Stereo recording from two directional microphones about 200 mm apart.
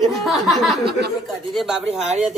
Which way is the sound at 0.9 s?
55° right (ahead or behind).